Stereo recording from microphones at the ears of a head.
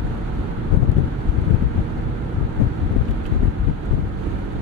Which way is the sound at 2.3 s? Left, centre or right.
Left.